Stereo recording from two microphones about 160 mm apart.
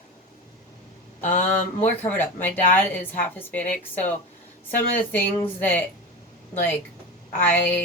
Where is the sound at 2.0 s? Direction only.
10° left (ahead or behind).